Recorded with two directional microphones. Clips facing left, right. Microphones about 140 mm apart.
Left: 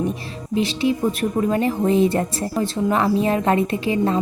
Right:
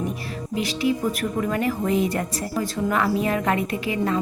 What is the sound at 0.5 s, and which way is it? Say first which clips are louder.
Speech: left 3 dB; 25° left (ahead or behind).